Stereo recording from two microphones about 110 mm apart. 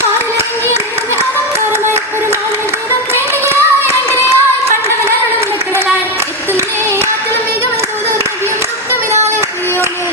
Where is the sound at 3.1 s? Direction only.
25° right (ahead or behind).